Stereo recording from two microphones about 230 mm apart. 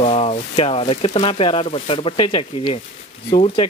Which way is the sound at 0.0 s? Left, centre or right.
Left.